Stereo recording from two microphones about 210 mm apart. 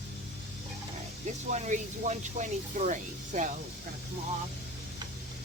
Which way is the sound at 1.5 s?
35° right (ahead or behind).